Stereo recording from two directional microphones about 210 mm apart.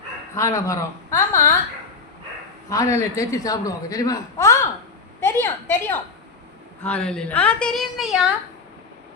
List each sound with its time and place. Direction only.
0.3 s a man's voice: 15° left (ahead or behind)
2.6 s a man's voice: 15° left (ahead or behind); by 8.2 s centre (ahead or behind)